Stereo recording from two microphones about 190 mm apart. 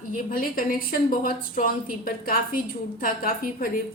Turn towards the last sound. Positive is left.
turn(degrees=50)  # may be behind; listen again after turning